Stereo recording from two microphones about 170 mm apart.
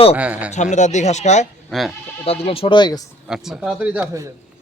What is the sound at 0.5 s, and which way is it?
Speech, 45° left (ahead or behind).